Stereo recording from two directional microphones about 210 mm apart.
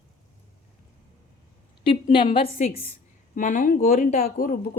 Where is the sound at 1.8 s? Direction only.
25° left (ahead or behind).